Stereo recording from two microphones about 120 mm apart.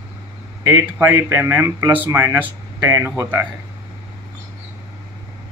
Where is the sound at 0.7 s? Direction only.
20° right (ahead or behind).